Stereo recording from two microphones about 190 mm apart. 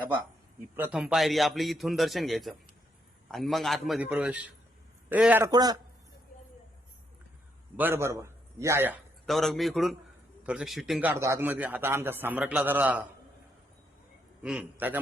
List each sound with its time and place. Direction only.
0.8 s a man's voice: 5° right (ahead or behind)
5.5 s a man's voice: 20° right (ahead or behind)
7.8 s a man's voice: 10° right (ahead or behind)
9.2 s a man's voice: centre (ahead or behind)
14.4 s a man's voice: 5° right (ahead or behind)